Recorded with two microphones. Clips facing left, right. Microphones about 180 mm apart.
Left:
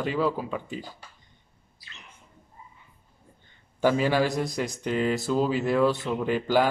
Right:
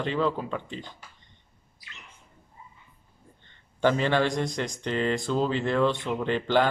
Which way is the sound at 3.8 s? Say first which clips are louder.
Left 1 dB; 5° left (ahead or behind).